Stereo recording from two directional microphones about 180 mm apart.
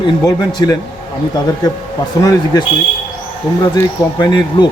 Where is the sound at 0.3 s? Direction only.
20° left (ahead or behind).